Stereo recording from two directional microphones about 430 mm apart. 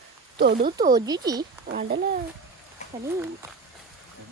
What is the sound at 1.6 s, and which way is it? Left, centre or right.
Speech, right.